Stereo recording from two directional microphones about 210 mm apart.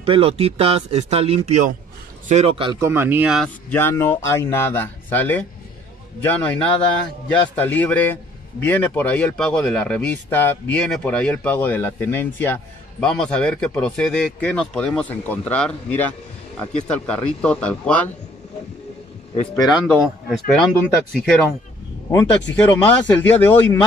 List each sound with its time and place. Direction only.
0.0 s speech: 25° right (ahead or behind); by 3.4 s 5° right (ahead or behind)
3.7 s a man's voice: 10° left (ahead or behind)
19.6 s speech: centre (ahead or behind)
22.1 s a man's voice: 5° left (ahead or behind)